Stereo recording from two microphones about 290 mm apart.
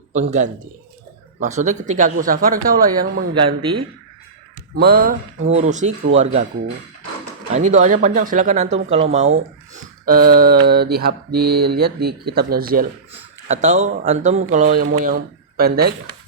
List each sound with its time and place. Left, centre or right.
0.1 s a man's voice: right
3.3 s speech: centre
4.8 s speech: right
7.5 s speech: right